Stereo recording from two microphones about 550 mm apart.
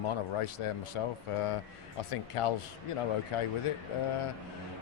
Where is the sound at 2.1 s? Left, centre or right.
Left.